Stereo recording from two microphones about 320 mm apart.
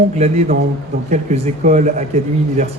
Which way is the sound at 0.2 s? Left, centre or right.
Centre.